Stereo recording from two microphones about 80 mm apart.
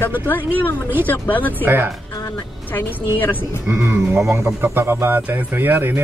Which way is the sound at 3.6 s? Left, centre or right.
Right.